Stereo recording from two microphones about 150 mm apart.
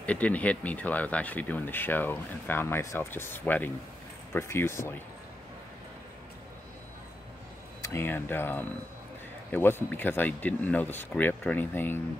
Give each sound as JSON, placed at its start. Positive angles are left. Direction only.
{"t": 0.0, "sound": "speech", "side_deg": 10}
{"t": 7.8, "sound": "speech", "side_deg": 15}